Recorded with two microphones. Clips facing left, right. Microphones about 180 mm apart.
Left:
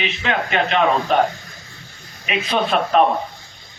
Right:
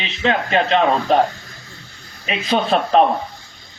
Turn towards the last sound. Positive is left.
turn(degrees=-30)  # may be behind; listen again after turning